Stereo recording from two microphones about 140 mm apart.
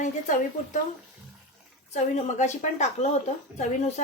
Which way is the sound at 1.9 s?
55° left (ahead or behind).